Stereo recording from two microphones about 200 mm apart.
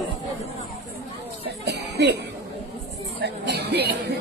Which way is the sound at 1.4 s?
55° right (ahead or behind).